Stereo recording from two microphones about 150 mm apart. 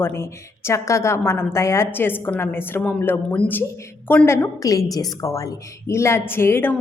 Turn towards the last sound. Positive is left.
turn(degrees=15)  # may be behind; listen again after turning